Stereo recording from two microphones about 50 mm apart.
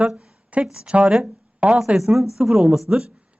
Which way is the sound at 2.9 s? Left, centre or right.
Right.